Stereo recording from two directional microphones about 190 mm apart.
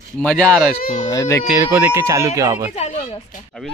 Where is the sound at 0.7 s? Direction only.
40° left (ahead or behind).